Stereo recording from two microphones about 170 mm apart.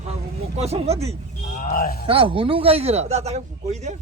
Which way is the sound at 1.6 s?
60° left (ahead or behind).